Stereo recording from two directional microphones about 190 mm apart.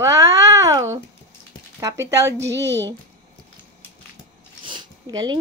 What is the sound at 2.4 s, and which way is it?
Speech, 65° right (ahead or behind).